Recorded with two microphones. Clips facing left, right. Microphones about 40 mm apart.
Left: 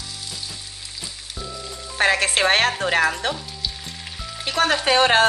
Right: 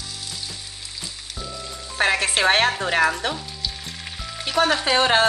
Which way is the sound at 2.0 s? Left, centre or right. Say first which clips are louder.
Left 2 dB; left.